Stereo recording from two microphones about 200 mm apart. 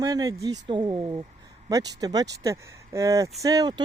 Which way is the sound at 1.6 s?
20° right (ahead or behind).